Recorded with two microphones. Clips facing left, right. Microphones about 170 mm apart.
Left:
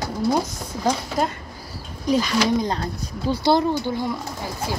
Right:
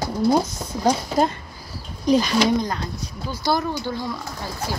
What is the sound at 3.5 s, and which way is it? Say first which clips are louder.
Speech: left 3 dB; 20° left (ahead or behind).